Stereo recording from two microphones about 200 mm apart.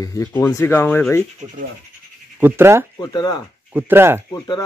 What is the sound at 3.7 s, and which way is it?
Speech, 10° right (ahead or behind).